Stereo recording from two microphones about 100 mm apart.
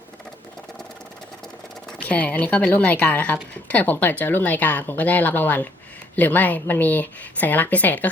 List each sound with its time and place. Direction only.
2.0 s speech: 15° left (ahead or behind)